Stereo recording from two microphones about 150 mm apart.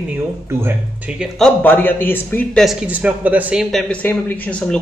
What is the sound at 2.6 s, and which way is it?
Speech, 5° right (ahead or behind).